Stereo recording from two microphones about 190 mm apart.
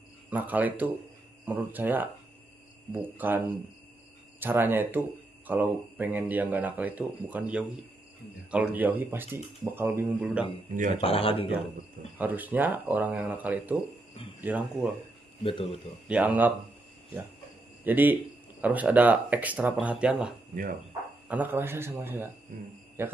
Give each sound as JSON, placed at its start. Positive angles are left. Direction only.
{"t": 0.3, "sound": "speech", "side_deg": -10}
{"t": 11.0, "sound": "speech", "side_deg": 30}
{"t": 12.2, "sound": "speech", "side_deg": -10}
{"t": 15.4, "sound": "speech", "side_deg": 30}
{"t": 16.1, "sound": "speech", "side_deg": -10}
{"t": 17.8, "sound": "speech", "side_deg": -10}